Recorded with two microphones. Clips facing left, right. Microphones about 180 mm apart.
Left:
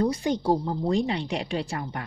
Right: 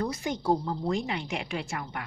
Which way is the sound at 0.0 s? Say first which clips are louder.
Left 6 dB; 30° left (ahead or behind).